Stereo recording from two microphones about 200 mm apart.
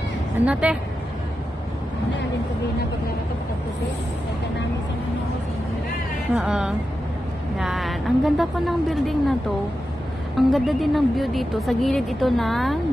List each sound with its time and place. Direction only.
0.5 s speech: 5° right (ahead or behind)
6.3 s speech: 5° right (ahead or behind)
10.3 s speech: centre (ahead or behind)